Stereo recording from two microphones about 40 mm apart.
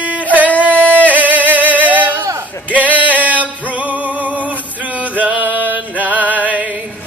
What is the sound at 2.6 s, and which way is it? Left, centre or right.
Music, right.